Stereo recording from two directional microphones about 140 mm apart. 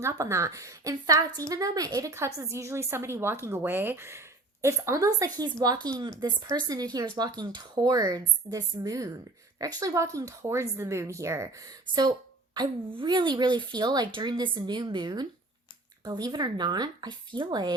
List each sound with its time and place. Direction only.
0.0 s a woman's voice: 20° right (ahead or behind)